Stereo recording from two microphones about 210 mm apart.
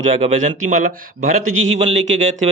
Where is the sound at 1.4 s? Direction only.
70° right (ahead or behind).